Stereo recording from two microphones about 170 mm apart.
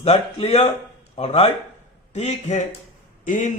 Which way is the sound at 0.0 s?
35° left (ahead or behind).